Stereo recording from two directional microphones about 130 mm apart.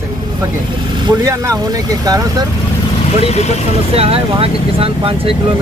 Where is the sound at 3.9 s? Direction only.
50° right (ahead or behind).